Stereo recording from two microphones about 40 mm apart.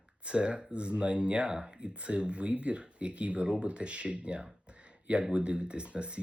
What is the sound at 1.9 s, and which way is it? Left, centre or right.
Speech, right.